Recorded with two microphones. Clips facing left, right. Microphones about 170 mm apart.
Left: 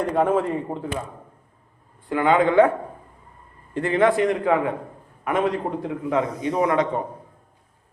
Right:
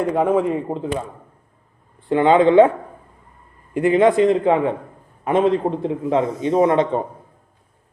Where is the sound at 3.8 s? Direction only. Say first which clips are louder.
Right 5 dB; 15° right (ahead or behind).